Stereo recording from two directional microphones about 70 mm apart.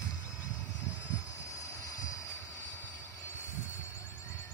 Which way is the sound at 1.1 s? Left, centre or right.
Left.